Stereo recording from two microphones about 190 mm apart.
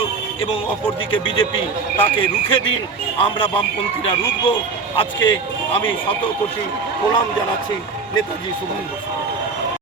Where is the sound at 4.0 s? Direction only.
25° left (ahead or behind).